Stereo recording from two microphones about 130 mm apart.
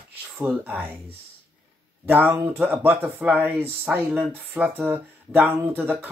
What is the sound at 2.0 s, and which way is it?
Speech, 15° right (ahead or behind).